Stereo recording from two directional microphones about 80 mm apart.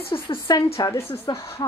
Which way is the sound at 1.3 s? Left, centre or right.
Left.